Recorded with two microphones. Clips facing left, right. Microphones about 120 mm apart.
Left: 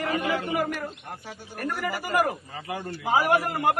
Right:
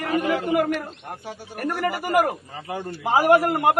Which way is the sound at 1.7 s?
20° right (ahead or behind).